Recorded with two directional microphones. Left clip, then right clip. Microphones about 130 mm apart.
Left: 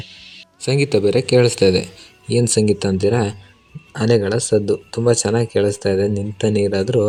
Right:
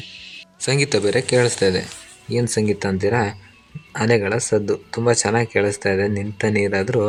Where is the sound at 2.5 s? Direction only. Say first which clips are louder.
Left 3 dB; 5° right (ahead or behind).